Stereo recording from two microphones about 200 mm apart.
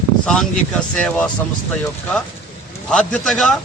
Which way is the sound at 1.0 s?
5° left (ahead or behind).